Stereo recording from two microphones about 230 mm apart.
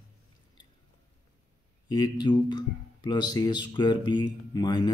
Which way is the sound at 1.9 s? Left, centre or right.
Centre.